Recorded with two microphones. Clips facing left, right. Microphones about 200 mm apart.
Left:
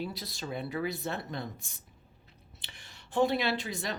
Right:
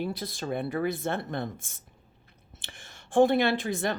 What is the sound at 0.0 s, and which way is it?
A woman's voice, 50° right (ahead or behind).